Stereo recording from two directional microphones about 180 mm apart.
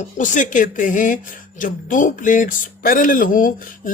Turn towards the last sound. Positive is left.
turn(degrees=50)  # may be behind; listen again after turning